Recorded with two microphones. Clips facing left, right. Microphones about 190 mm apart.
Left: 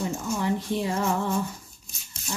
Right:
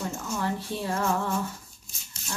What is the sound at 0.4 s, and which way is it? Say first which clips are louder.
Speech: left 4 dB; 15° left (ahead or behind).